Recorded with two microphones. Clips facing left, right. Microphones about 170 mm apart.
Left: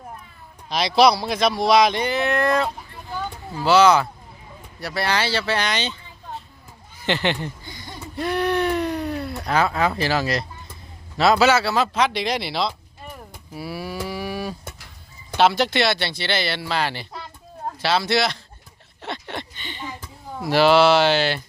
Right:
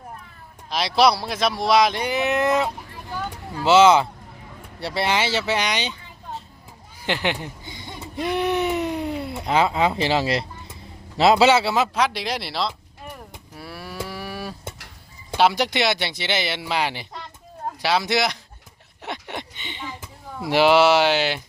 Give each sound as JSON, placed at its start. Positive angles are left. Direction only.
{"t": 0.7, "sound": "speech", "side_deg": 0}
{"t": 2.0, "sound": "speech", "side_deg": -15}
{"t": 7.0, "sound": "a sound", "side_deg": -10}
{"t": 11.2, "sound": "speech", "side_deg": -25}
{"t": 12.0, "sound": "speech", "side_deg": -5}
{"t": 14.1, "sound": "a sound", "side_deg": 0}
{"t": 15.4, "sound": "speech", "side_deg": -10}
{"t": 19.0, "sound": "a sound", "side_deg": -15}
{"t": 20.5, "sound": "speech", "side_deg": -15}